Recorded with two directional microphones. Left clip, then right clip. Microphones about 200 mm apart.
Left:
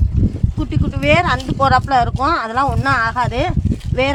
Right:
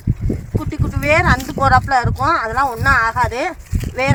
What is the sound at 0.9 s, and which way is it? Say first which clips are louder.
Speech: even; 40° left (ahead or behind).